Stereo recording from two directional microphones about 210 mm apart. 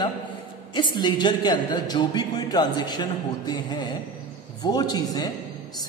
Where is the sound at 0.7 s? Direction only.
20° left (ahead or behind).